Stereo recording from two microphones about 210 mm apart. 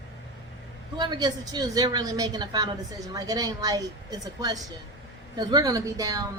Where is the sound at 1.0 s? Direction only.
20° right (ahead or behind).